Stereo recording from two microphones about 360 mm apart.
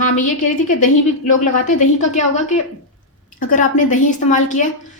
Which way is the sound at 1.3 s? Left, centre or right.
Centre.